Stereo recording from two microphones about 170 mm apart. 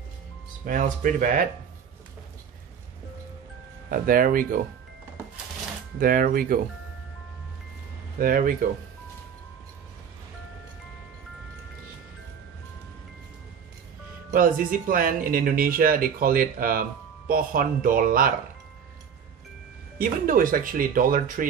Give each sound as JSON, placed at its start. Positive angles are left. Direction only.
{"t": 0.7, "sound": "speech", "side_deg": -50}
{"t": 3.9, "sound": "speech", "side_deg": -55}
{"t": 5.9, "sound": "speech", "side_deg": -55}
{"t": 8.2, "sound": "speech", "side_deg": -55}
{"t": 14.3, "sound": "speech", "side_deg": -55}
{"t": 20.0, "sound": "speech", "side_deg": -55}